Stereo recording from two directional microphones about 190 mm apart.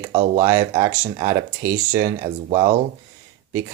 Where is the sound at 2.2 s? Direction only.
30° right (ahead or behind).